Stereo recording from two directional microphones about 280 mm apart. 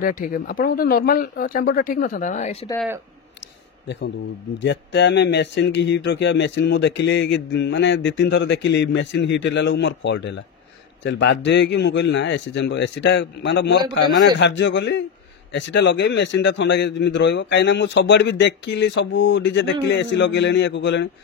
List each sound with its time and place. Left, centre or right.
0.0 s speech: left
3.8 s speech: left